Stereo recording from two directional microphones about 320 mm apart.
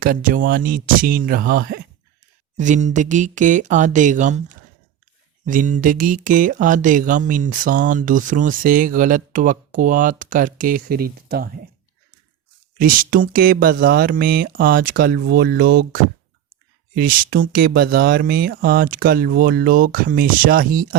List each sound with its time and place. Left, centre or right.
0.0 s speech: right
12.8 s speech: right
17.0 s speech: right